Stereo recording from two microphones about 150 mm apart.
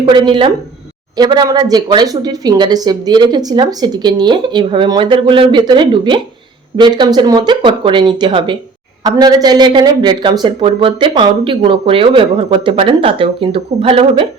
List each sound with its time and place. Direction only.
0.0 s speech: 35° right (ahead or behind)